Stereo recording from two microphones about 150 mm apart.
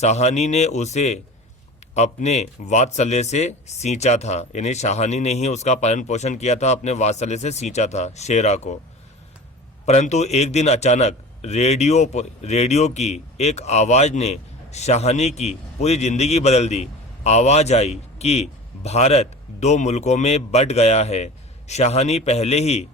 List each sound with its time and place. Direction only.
0.0 s a man's voice: 45° left (ahead or behind)
9.8 s a man's voice: 50° left (ahead or behind)